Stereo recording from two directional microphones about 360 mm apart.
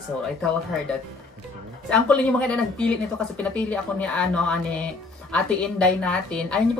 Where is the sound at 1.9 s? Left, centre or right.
Centre.